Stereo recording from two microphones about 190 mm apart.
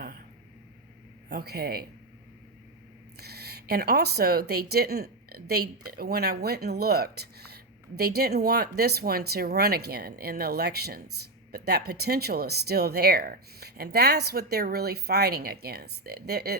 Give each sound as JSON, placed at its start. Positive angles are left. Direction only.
{"t": 1.3, "sound": "speech", "side_deg": -55}
{"t": 3.2, "sound": "speech", "side_deg": -55}